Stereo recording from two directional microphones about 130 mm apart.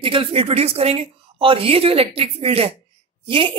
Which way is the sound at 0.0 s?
45° right (ahead or behind).